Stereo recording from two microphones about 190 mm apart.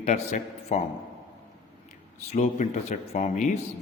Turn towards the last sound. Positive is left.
turn(degrees=35)  # may be behind; listen again after turning